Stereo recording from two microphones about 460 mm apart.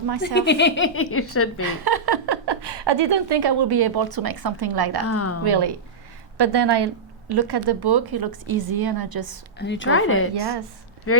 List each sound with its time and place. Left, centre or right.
0.3 s speech: left
1.6 s speech: right
5.0 s a woman's voice: left
5.5 s a woman's voice: right
9.6 s speech: left